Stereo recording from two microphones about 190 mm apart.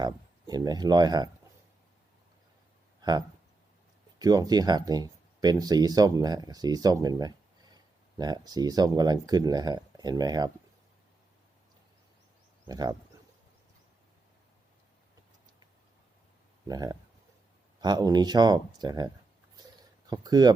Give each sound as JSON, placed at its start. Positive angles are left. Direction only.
{"t": 0.0, "sound": "speech", "side_deg": -20}
{"t": 3.0, "sound": "speech", "side_deg": -20}
{"t": 12.6, "sound": "speech", "side_deg": -20}
{"t": 16.6, "sound": "speech", "side_deg": -20}